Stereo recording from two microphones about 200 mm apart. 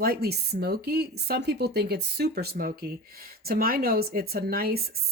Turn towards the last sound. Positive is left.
turn(degrees=-50)  # may be behind; listen again after turning